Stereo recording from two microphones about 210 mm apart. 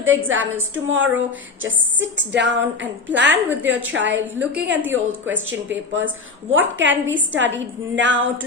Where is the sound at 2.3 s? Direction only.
60° right (ahead or behind).